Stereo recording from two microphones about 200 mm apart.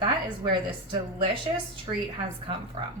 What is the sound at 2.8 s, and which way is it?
Speech, 25° right (ahead or behind).